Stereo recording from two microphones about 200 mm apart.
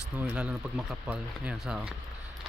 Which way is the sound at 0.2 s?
5° right (ahead or behind).